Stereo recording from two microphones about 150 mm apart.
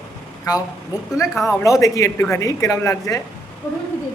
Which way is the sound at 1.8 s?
20° left (ahead or behind).